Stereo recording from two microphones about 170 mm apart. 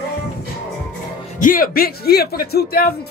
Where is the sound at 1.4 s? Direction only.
55° left (ahead or behind).